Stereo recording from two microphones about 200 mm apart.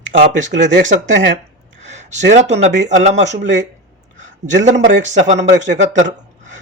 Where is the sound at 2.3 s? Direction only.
35° right (ahead or behind).